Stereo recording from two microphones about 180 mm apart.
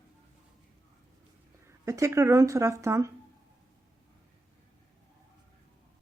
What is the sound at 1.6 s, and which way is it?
Speech, 15° right (ahead or behind).